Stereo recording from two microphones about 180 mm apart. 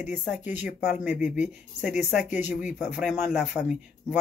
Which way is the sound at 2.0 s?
5° right (ahead or behind).